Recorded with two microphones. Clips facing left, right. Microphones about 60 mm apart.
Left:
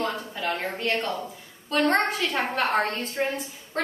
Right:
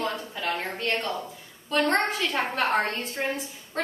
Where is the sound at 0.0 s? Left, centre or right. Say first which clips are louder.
Left 1 dB; centre.